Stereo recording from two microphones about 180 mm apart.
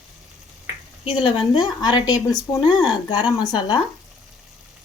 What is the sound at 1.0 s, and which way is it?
Speech, 30° left (ahead or behind).